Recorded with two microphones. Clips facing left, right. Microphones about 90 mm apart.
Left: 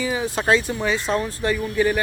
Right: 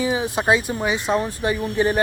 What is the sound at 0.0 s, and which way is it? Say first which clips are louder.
Speech: right 2 dB; 20° right (ahead or behind).